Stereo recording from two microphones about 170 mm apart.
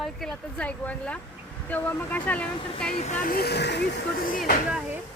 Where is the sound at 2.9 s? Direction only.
45° left (ahead or behind); by 3.9 s 85° left.